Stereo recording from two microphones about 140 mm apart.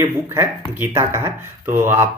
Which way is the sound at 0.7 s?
15° right (ahead or behind).